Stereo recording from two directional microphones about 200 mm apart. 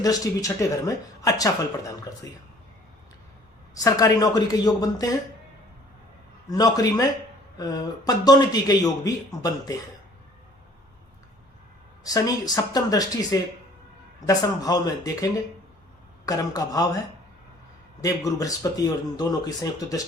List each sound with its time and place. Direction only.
0.0 s speech: 15° left (ahead or behind)
3.8 s speech: 15° left (ahead or behind)
6.5 s speech: 20° left (ahead or behind)
12.0 s speech: 20° left (ahead or behind)
18.0 s speech: 15° left (ahead or behind)